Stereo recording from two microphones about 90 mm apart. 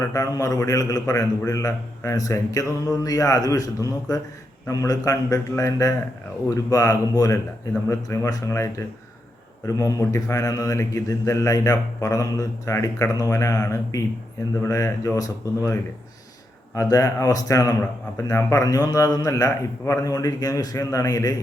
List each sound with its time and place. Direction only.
0.0 s speech: 35° left (ahead or behind)
20.1 s speech: 45° left (ahead or behind)